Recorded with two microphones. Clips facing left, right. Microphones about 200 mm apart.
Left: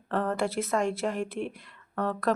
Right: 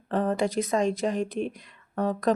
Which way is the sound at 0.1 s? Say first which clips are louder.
Right 3 dB; 15° right (ahead or behind).